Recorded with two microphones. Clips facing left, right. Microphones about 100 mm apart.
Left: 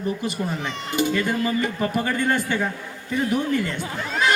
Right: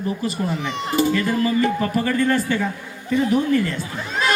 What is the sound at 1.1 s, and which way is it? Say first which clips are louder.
A man's voice: right 3 dB; 20° left (ahead or behind).